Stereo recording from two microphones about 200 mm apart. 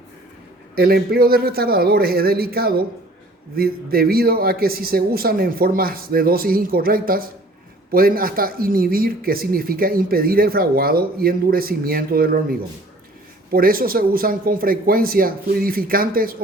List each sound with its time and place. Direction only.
0.8 s speech: 50° right (ahead or behind)